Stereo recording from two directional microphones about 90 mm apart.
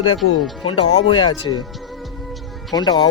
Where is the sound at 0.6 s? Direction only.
80° left.